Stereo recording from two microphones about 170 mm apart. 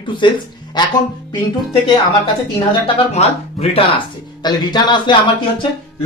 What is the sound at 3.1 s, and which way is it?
Speech, 35° left (ahead or behind).